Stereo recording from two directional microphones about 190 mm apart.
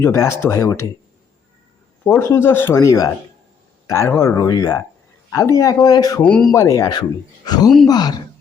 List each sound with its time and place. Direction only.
0.0 s speech: 15° left (ahead or behind)
2.0 s speech: 15° left (ahead or behind)
6.2 s speech: 5° left (ahead or behind)